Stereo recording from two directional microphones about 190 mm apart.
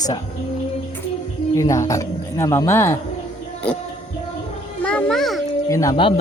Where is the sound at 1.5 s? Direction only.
15° left (ahead or behind).